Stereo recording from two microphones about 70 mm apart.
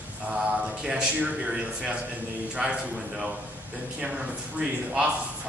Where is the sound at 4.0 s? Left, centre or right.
Centre.